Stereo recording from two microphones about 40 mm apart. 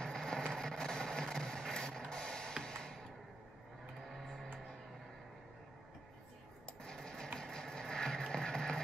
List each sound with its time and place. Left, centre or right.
0.0 s a sound: centre
0.5 s printer: centre
2.6 s music: centre
4.1 s music: centre
6.8 s printer: centre
7.3 s music: centre
8.3 s a sound: centre